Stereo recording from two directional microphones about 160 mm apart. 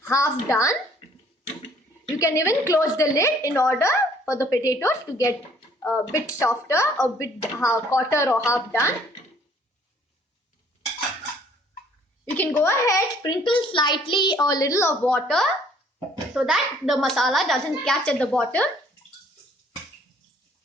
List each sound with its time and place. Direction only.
0.0 s a child's voice: 20° left (ahead or behind)
2.1 s a child's voice: 20° left (ahead or behind)
12.2 s a child's voice: 10° left (ahead or behind)